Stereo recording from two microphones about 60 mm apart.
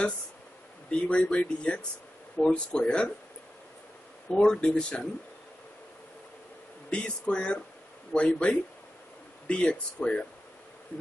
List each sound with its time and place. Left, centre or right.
0.8 s speech: centre
4.3 s speech: centre
6.9 s speech: centre